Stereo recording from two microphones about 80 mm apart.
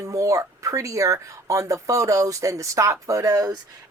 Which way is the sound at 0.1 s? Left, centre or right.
Right.